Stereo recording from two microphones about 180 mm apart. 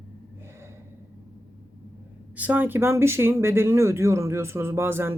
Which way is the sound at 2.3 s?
10° right (ahead or behind).